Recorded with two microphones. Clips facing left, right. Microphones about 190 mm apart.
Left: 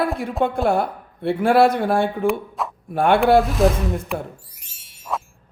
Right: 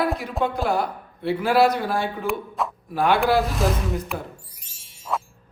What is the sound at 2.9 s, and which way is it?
Speech, 55° left (ahead or behind).